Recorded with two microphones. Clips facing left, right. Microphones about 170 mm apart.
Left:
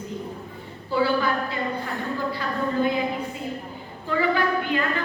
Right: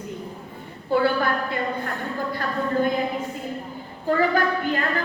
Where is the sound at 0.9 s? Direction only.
55° right (ahead or behind).